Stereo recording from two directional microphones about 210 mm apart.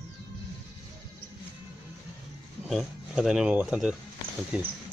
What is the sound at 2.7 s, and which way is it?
Speech, centre (ahead or behind).